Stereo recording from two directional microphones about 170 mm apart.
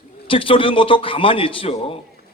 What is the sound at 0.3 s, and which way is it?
A man's voice, 30° left (ahead or behind).